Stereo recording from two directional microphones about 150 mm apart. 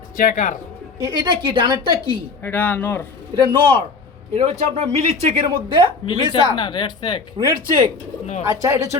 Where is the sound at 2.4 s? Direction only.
15° left (ahead or behind).